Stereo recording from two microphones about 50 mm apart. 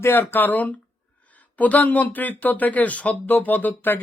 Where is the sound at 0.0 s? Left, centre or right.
Left.